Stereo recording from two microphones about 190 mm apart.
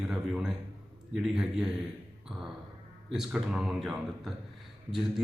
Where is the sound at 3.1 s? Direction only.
5° right (ahead or behind).